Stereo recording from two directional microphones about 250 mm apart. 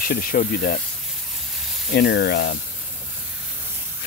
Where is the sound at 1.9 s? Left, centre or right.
Left.